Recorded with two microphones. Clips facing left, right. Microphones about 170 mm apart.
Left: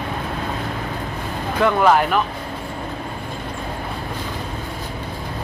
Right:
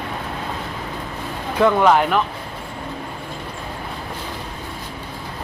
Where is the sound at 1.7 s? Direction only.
5° left (ahead or behind).